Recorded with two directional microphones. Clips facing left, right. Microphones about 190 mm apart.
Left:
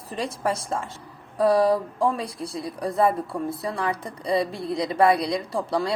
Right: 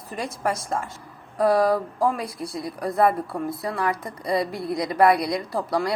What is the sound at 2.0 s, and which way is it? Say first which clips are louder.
A woman's voice: even; 30° left (ahead or behind).